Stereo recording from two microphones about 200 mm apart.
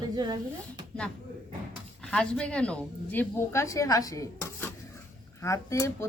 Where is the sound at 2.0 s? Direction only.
5° left (ahead or behind).